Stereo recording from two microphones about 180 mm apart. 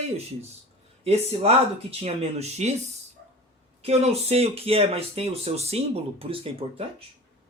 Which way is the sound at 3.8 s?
35° right (ahead or behind).